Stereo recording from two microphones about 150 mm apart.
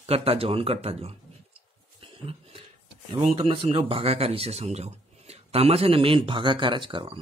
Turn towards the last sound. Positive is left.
turn(degrees=-35)  # may be behind; listen again after turning